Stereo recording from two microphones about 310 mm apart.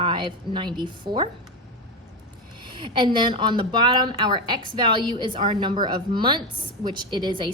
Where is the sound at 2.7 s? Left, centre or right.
Centre.